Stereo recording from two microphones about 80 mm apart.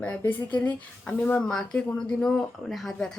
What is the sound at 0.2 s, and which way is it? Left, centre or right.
A woman's voice, left.